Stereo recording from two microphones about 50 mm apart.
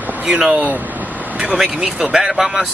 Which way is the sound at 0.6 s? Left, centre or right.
Right.